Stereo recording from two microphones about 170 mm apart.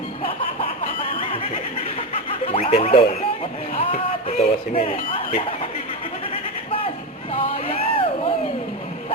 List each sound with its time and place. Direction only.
2.1 s music: 35° left (ahead or behind)
3.8 s speech: 35° left (ahead or behind)
7.3 s vehicle: 35° left (ahead or behind)